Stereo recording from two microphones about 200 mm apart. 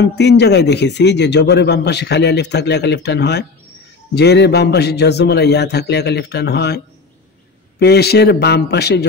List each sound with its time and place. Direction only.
0.0 s a man's voice: 55° left (ahead or behind)
7.8 s a man's voice: 55° left (ahead or behind)